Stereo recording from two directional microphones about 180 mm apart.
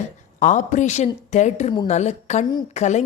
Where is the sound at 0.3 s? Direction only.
45° left (ahead or behind).